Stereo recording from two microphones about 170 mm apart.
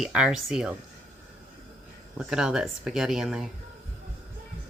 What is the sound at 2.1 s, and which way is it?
A woman's voice, 5° right (ahead or behind).